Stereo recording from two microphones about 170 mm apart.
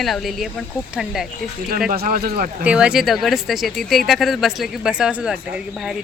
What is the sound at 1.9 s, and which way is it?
Speech, 55° right (ahead or behind).